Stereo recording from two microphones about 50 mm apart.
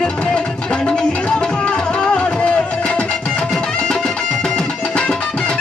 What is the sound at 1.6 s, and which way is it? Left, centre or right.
Music, left.